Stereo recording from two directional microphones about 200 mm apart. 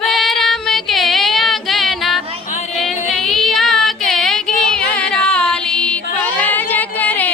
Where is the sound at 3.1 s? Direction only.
Centre (ahead or behind).